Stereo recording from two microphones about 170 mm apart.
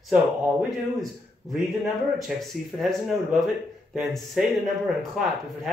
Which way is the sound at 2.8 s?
Centre (ahead or behind).